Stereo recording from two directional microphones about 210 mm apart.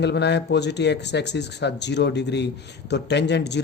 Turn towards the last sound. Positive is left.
turn(degrees=55)  # may be behind; listen again after turning